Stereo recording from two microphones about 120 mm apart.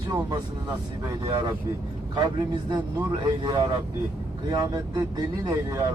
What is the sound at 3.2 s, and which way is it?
Speech, 35° right (ahead or behind).